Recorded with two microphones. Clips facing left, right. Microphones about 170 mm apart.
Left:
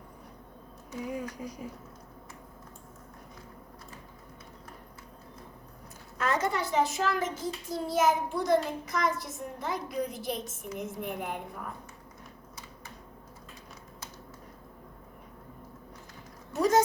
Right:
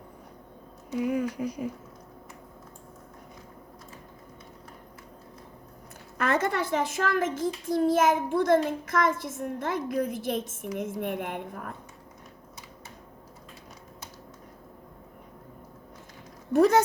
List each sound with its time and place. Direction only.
0.9 s speech: 70° right (ahead or behind)
6.1 s a child's voice: 60° right (ahead or behind)
16.5 s a sound: 60° right (ahead or behind)